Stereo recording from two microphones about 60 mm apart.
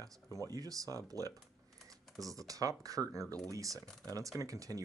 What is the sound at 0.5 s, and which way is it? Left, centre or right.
Speech, right.